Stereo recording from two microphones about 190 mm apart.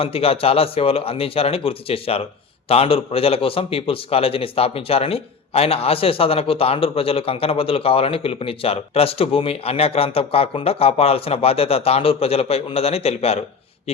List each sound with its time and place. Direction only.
0.0 s speech: 30° left (ahead or behind)